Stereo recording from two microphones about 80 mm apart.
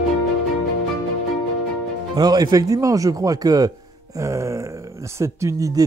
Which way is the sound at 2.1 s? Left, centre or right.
Right.